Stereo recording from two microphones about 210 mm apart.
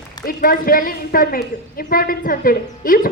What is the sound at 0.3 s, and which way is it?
A woman's voice, 45° left (ahead or behind).